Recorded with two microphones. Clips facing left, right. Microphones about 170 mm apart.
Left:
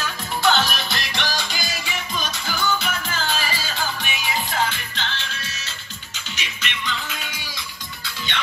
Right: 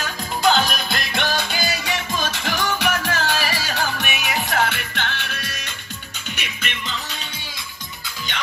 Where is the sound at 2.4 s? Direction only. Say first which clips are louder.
Right 2 dB; 75° right (ahead or behind); by 6.9 s 50° right (ahead or behind).